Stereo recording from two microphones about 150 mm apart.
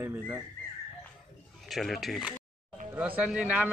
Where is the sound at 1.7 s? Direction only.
Centre (ahead or behind).